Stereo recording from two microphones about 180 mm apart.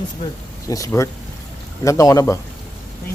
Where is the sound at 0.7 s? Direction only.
15° left (ahead or behind).